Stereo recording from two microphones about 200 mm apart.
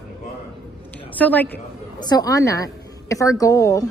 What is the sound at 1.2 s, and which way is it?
Speech, 10° left (ahead or behind).